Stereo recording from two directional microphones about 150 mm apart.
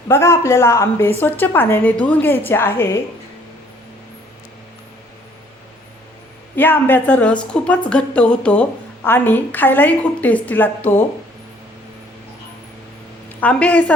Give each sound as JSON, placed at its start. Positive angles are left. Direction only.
{"t": 0.1, "sound": "a woman's voice", "side_deg": 15}
{"t": 6.6, "sound": "a woman's voice", "side_deg": 15}
{"t": 13.4, "sound": "a woman's voice", "side_deg": 10}